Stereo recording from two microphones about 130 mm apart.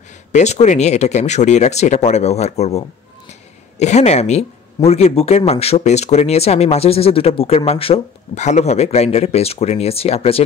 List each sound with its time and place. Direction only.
0.3 s speech: 60° left (ahead or behind)
3.8 s speech: 60° left (ahead or behind)